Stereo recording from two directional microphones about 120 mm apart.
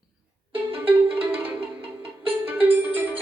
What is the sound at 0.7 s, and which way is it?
Music, 15° right (ahead or behind).